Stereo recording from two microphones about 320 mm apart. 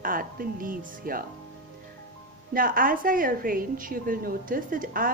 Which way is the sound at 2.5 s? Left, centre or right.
Right.